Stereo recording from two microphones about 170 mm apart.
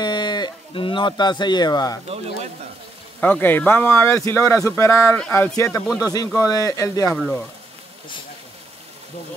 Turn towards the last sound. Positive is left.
turn(degrees=5)  # may be behind; listen again after turning